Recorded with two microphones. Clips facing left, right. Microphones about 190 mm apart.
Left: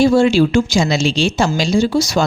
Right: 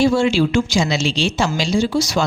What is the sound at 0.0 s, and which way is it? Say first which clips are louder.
A woman's voice: left 4 dB; 40° left (ahead or behind).